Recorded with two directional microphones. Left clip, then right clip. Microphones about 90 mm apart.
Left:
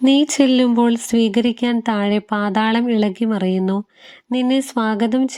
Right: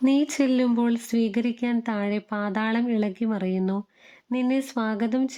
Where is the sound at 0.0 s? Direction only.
45° left (ahead or behind).